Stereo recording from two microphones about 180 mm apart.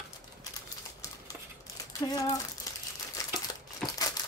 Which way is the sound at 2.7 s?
20° left (ahead or behind).